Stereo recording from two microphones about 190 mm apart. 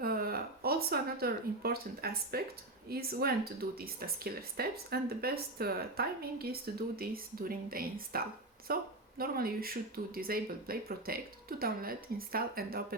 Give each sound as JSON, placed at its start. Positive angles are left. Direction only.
{"t": 0.0, "sound": "speech", "side_deg": -50}